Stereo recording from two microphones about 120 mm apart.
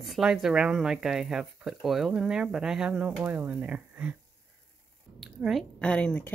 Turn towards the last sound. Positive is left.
turn(degrees=10)  # may be behind; listen again after turning